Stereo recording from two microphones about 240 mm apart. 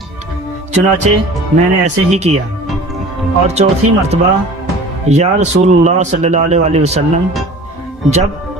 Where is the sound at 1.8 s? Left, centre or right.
Right.